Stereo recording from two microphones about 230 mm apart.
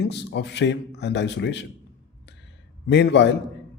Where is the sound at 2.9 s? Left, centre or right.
Left.